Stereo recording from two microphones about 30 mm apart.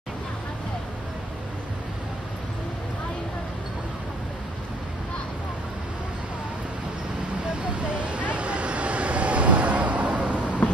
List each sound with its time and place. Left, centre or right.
7.9 s vehicle: right